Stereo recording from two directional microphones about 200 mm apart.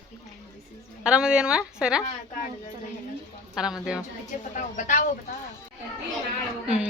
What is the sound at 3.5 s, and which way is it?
Speech, 5° right (ahead or behind).